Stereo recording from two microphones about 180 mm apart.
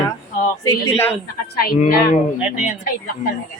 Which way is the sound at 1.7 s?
50° left (ahead or behind).